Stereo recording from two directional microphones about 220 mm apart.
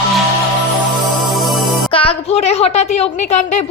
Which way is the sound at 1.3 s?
Centre (ahead or behind).